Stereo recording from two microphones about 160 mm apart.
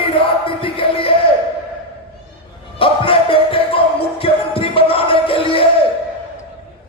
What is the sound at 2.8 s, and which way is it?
Music, 35° left (ahead or behind).